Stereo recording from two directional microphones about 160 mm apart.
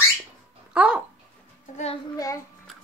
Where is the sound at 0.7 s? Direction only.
5° right (ahead or behind).